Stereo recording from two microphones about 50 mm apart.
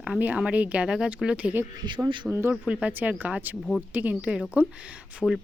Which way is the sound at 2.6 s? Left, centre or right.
Right.